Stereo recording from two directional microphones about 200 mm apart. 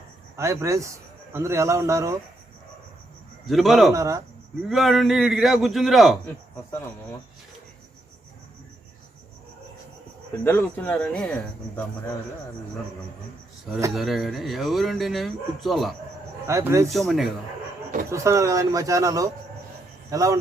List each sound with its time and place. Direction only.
0.3 s a man's voice: 15° right (ahead or behind)
3.4 s a man's voice: centre (ahead or behind)
3.9 s a man's voice: 15° right (ahead or behind)
4.7 s a man's voice: centre (ahead or behind)
10.4 s speech: 10° left (ahead or behind)
13.9 s a man's voice: centre (ahead or behind)
16.5 s a man's voice: 15° right (ahead or behind)
16.9 s a man's voice: centre (ahead or behind)
18.1 s a man's voice: 15° right (ahead or behind)